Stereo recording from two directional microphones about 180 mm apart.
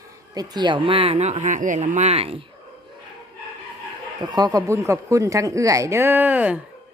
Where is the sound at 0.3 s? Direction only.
25° right (ahead or behind).